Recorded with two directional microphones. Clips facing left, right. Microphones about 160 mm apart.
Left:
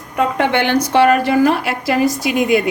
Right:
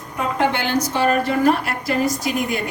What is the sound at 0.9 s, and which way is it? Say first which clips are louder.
A woman's voice: left 8 dB; 80° left.